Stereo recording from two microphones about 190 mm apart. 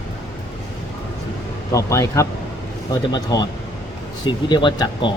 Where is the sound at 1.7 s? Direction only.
15° left (ahead or behind).